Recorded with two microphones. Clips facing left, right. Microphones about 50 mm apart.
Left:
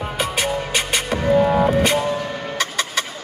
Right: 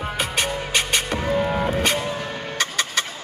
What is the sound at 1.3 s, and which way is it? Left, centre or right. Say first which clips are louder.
Music: left 7 dB; centre.